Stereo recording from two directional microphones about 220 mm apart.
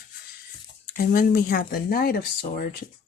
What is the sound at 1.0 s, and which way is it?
Speech, 40° left (ahead or behind).